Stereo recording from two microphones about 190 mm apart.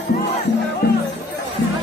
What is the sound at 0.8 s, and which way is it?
Music, 55° left (ahead or behind).